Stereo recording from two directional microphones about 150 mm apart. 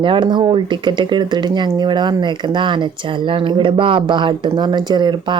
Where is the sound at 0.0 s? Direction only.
35° right (ahead or behind).